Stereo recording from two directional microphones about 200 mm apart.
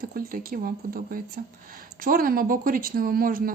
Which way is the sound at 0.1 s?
45° right (ahead or behind).